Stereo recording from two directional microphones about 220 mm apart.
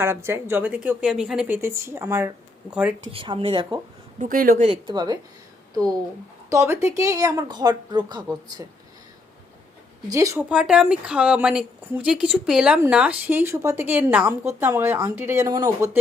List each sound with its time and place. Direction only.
0.0 s speech: 10° right (ahead or behind)
3.1 s speech: 25° right (ahead or behind)
4.2 s a woman's voice: 40° right (ahead or behind); by 8.6 s 20° right (ahead or behind)
10.1 s speech: 15° right (ahead or behind)